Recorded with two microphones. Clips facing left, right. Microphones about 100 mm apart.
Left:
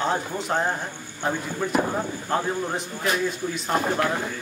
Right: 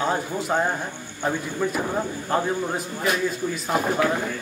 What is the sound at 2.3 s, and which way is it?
A man's voice, 5° right (ahead or behind).